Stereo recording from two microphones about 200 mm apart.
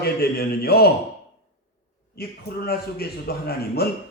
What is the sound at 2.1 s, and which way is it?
A man's voice, 50° left (ahead or behind).